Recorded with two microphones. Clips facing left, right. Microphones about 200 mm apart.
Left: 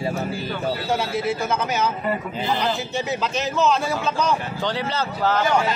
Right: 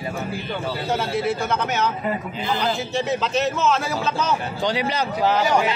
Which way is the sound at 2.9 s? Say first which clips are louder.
Right 2 dB; centre (ahead or behind).